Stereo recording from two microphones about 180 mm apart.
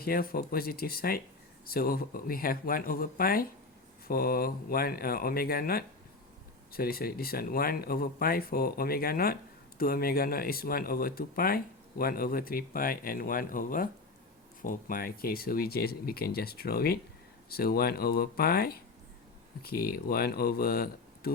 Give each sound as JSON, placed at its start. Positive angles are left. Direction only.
{"t": 0.0, "sound": "speech", "side_deg": 55}